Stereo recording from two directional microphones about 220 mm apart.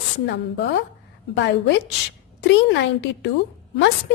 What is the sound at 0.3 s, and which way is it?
A woman's voice, 50° left (ahead or behind).